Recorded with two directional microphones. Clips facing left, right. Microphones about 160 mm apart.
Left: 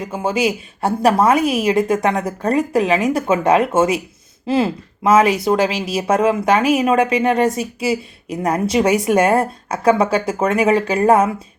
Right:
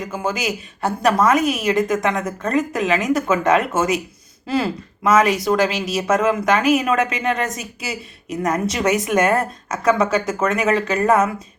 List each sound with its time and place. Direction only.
0.0 s a woman's voice: 30° left (ahead or behind)